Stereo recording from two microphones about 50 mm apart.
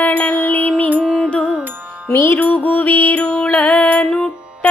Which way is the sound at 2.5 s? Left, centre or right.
Left.